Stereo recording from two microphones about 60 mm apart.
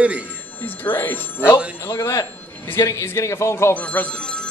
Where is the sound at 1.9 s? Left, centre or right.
Left.